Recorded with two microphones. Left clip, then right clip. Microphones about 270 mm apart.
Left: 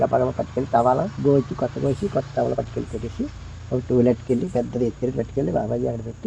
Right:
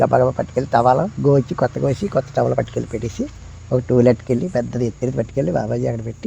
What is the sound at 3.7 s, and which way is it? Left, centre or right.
Speech, right.